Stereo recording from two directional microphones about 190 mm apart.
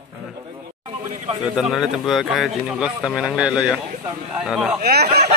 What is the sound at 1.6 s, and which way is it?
Speech, centre (ahead or behind).